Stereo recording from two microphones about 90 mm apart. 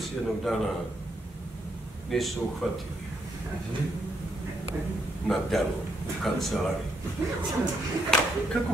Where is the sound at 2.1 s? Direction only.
5° left (ahead or behind).